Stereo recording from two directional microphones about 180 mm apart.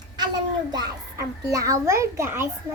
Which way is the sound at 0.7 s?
20° right (ahead or behind).